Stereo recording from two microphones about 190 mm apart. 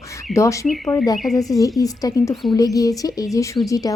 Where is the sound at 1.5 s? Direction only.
20° left (ahead or behind).